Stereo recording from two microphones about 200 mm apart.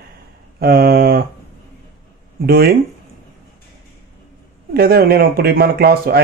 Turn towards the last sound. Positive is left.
turn(degrees=-50)  # may be behind; listen again after turning